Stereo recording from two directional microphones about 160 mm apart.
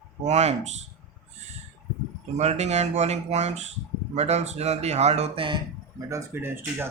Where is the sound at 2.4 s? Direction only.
45° right (ahead or behind).